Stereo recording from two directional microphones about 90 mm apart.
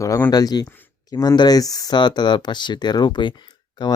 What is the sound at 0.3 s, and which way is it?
Speech, 45° left (ahead or behind).